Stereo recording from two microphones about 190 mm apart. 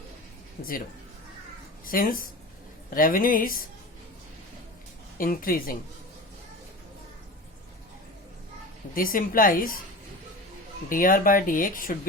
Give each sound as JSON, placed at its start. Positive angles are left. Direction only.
{"t": 1.8, "sound": "speech", "side_deg": 50}
{"t": 5.1, "sound": "speech", "side_deg": 50}
{"t": 9.0, "sound": "speech", "side_deg": 50}
{"t": 10.8, "sound": "speech", "side_deg": 45}